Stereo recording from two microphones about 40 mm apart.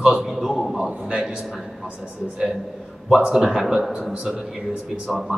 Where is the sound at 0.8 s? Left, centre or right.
Right.